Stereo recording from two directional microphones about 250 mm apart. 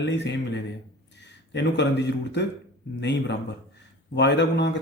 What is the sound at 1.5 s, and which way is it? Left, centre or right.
A man's voice, left.